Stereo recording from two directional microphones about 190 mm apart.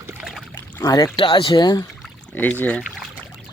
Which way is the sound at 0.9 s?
20° left (ahead or behind).